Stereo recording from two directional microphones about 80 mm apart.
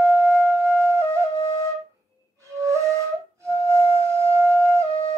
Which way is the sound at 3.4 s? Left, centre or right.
Right.